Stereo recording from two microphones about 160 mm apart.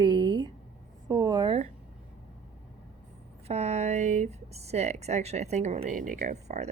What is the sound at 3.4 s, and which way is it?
Speech, 40° right (ahead or behind).